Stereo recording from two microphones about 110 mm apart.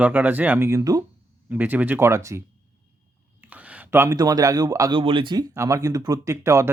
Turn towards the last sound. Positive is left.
turn(degrees=-30)  # may be behind; listen again after turning